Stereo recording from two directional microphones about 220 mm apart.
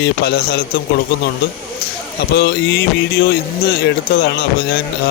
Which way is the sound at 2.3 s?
50° left (ahead or behind).